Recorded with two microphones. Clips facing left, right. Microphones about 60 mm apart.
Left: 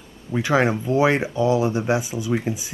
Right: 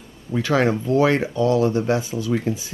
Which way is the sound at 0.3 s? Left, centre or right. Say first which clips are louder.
Even; centre.